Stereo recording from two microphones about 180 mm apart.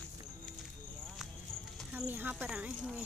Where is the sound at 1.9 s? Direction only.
10° right (ahead or behind).